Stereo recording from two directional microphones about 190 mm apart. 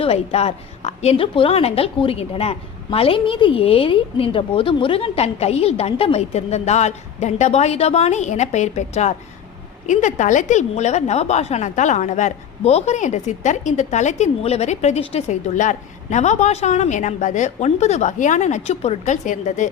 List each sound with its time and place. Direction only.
0.0 s a woman's voice: 30° left (ahead or behind)